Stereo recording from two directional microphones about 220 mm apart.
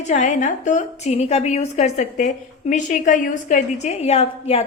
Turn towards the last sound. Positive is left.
turn(degrees=30)  # may be behind; listen again after turning